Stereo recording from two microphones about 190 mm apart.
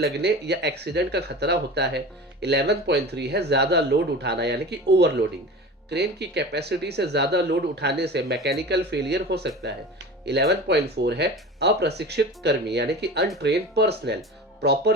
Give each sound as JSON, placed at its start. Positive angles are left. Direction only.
{"t": 0.0, "sound": "speech", "side_deg": -60}